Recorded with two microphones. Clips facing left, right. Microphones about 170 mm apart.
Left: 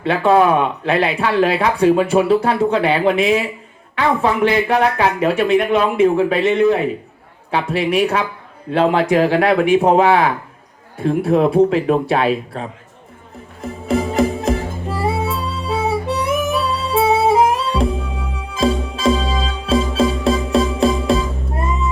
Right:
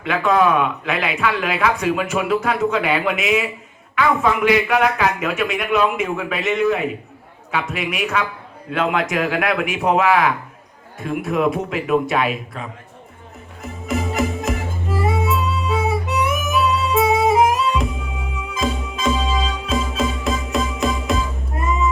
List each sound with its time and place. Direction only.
0.0 s speech: 30° left (ahead or behind)
13.6 s music: 30° left (ahead or behind)